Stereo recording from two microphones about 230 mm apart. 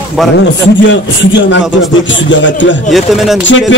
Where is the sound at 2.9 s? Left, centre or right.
Centre.